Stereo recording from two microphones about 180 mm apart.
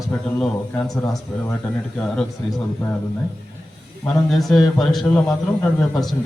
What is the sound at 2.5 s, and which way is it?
Speech, 15° left (ahead or behind).